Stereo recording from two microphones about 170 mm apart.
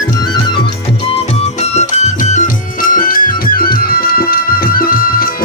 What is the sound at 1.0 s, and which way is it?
Music, 35° left (ahead or behind).